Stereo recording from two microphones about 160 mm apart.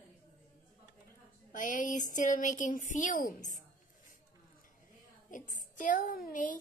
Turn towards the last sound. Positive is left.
turn(degrees=55)  # may be behind; listen again after turning